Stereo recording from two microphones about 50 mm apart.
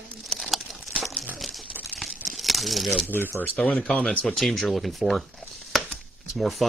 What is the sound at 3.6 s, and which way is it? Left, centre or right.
Speech, left.